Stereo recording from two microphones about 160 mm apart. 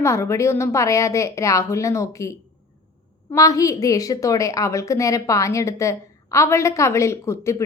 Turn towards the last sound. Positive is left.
turn(degrees=20)  # may be behind; listen again after turning